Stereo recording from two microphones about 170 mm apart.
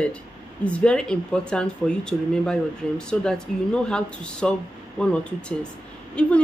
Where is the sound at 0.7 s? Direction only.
5° left (ahead or behind).